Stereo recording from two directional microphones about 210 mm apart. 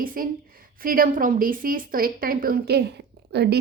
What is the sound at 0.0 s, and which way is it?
A woman's voice, 40° right (ahead or behind).